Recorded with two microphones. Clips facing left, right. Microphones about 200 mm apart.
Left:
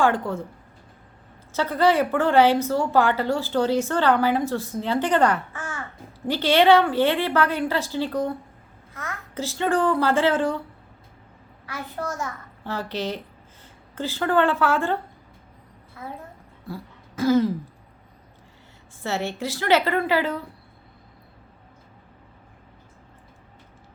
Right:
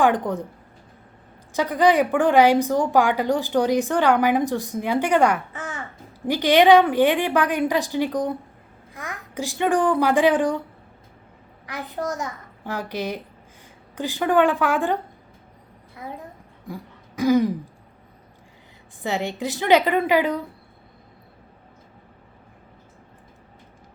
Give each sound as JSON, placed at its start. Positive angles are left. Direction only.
{"t": 0.0, "sound": "a woman's voice", "side_deg": -15}
{"t": 1.5, "sound": "a woman's voice", "side_deg": -15}
{"t": 11.6, "sound": "a woman's voice", "side_deg": -15}
{"t": 16.0, "sound": "a woman's voice", "side_deg": -15}
{"t": 16.6, "sound": "throat clearing", "side_deg": -15}
{"t": 19.0, "sound": "a woman's voice", "side_deg": -15}